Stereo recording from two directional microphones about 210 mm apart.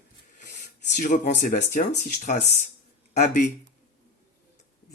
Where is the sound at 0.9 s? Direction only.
35° left (ahead or behind).